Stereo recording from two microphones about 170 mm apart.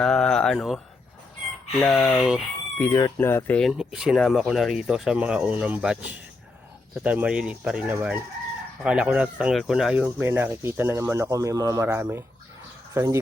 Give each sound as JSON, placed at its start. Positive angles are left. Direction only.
{"t": 0.0, "sound": "a sound", "side_deg": 5}
{"t": 1.7, "sound": "speech", "side_deg": 0}
{"t": 2.7, "sound": "speech", "side_deg": 15}
{"t": 3.7, "sound": "speech", "side_deg": -5}